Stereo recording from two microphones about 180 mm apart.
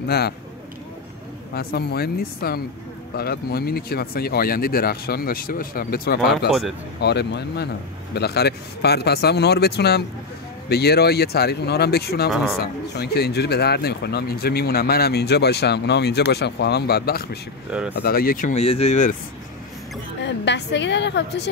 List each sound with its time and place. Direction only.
1.5 s speech: 60° left (ahead or behind)
7.0 s speech: 70° left (ahead or behind)
17.6 s speech: 5° right (ahead or behind)
17.9 s speech: 55° left (ahead or behind); by 19.1 s 40° left (ahead or behind)
20.2 s a woman's voice: 75° left (ahead or behind)